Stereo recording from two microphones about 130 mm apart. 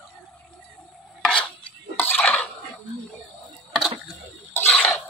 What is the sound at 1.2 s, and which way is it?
Chopping, 5° left (ahead or behind).